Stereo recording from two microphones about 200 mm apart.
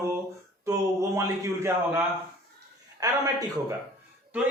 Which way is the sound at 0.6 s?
15° right (ahead or behind).